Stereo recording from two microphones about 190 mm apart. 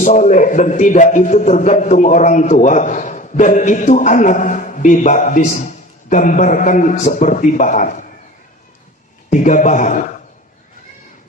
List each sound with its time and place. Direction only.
0.0 s a man's voice: 40° left (ahead or behind)
9.3 s a man's voice: 40° left (ahead or behind)